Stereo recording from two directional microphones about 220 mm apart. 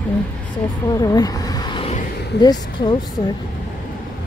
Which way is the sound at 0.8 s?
15° left (ahead or behind).